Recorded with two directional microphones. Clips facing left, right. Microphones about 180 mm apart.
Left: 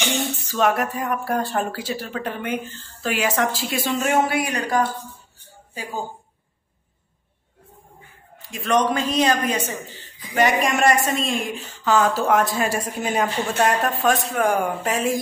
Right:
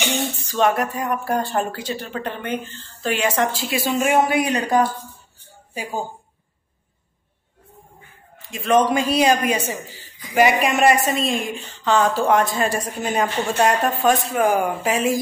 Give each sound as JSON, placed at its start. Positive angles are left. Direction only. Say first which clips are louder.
{"t": 0.5, "sound": "a man's voice", "louder": "right 1 dB", "side_deg": 0}
{"t": 4.0, "sound": "speech", "louder": "right 3 dB", "side_deg": -10}
{"t": 8.5, "sound": "a man's voice", "louder": "right 3 dB", "side_deg": 0}